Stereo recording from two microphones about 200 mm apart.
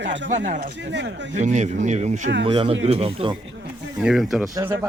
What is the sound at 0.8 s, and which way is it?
Speech, 60° right (ahead or behind).